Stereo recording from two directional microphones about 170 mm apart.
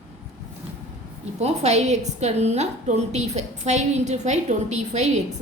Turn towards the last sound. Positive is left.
turn(degrees=-40)  # may be behind; listen again after turning